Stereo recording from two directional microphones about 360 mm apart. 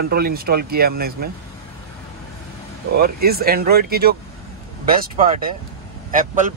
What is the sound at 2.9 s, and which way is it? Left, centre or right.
Speech, right.